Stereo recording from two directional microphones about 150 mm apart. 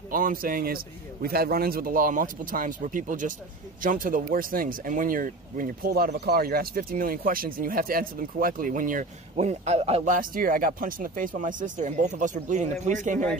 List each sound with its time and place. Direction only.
0.1 s speech: 70° right (ahead or behind)
1.2 s speech: 90° right; by 9.0 s 65° right (ahead or behind)
9.4 s a man's voice: 45° right (ahead or behind)
10.0 s speech: 65° right (ahead or behind)